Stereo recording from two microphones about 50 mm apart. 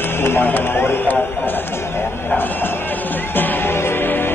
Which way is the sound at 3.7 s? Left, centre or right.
Left.